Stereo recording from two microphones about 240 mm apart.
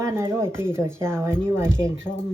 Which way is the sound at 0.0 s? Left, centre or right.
Centre.